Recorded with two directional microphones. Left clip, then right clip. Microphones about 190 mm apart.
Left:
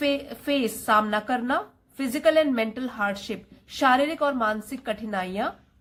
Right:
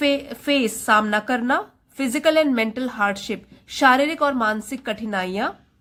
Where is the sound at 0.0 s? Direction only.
20° right (ahead or behind).